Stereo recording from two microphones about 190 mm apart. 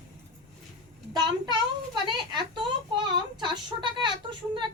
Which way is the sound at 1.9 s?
25° right (ahead or behind).